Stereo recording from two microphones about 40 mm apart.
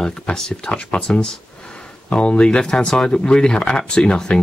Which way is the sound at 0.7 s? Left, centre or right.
Left.